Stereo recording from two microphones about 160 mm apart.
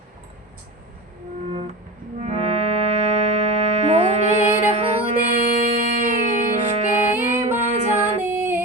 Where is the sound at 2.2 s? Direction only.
40° right (ahead or behind).